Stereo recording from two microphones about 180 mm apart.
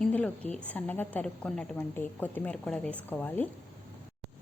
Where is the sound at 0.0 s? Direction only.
10° left (ahead or behind).